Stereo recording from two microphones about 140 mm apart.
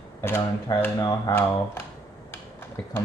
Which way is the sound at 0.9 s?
25° left (ahead or behind).